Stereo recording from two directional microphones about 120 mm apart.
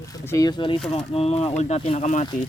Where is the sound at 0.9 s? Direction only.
55° left (ahead or behind).